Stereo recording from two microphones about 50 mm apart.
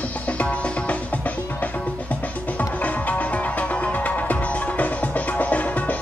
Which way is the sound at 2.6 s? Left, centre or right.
Left.